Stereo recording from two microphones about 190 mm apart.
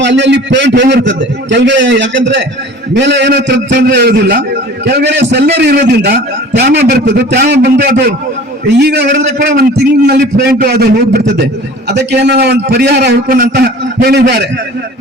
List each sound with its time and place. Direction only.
0.0 s a man's voice: 70° right (ahead or behind)
3.8 s a man's voice: 55° right (ahead or behind)